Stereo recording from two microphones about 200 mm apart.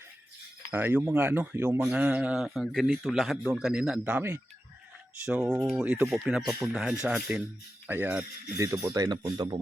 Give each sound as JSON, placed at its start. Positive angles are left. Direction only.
{"t": 0.7, "sound": "speech", "side_deg": -10}